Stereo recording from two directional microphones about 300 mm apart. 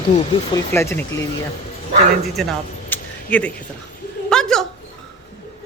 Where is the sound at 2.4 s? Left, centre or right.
Centre.